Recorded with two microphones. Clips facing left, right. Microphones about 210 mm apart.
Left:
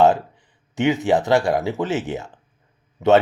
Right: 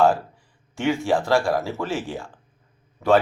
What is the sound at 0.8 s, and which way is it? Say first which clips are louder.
Speech: left 3 dB; 20° left (ahead or behind).